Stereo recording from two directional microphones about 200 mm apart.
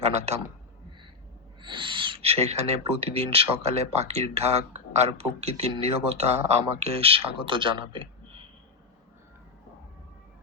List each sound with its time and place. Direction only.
1.6 s speech: 25° right (ahead or behind)